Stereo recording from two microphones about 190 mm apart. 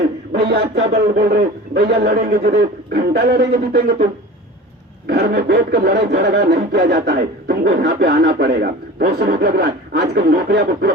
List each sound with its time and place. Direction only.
0.3 s speech: 60° right (ahead or behind)
5.0 s speech: 55° right (ahead or behind)